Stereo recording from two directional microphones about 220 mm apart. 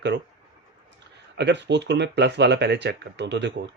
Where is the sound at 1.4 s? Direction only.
50° right (ahead or behind).